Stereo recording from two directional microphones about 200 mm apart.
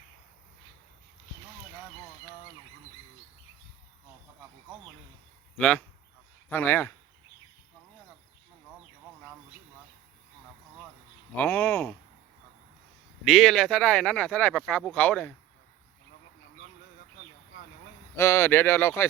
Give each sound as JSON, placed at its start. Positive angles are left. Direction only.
{"t": 5.5, "sound": "speech", "side_deg": 5}
{"t": 11.3, "sound": "speech", "side_deg": 10}
{"t": 13.2, "sound": "speech", "side_deg": 0}
{"t": 18.2, "sound": "speech", "side_deg": 15}